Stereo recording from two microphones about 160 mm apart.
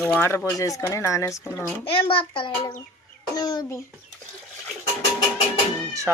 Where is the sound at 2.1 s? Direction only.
30° left (ahead or behind).